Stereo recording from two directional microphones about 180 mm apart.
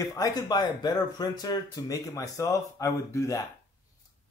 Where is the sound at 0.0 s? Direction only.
20° left (ahead or behind).